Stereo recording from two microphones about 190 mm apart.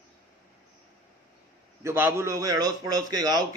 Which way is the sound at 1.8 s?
15° right (ahead or behind).